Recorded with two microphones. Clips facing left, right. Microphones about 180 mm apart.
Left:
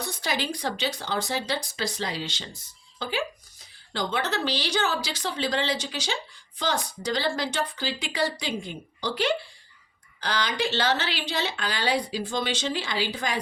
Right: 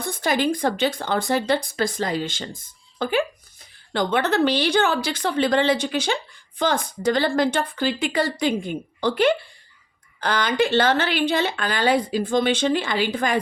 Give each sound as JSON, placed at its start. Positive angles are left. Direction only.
{"t": 0.0, "sound": "speech", "side_deg": -50}